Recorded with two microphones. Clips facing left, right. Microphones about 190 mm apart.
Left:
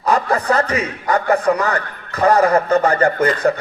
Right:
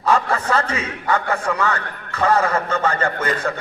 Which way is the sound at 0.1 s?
35° left (ahead or behind).